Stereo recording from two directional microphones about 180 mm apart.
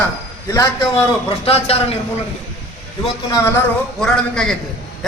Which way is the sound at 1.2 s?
35° left (ahead or behind).